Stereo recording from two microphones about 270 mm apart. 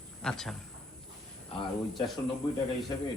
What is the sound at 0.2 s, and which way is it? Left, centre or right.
Speech, centre.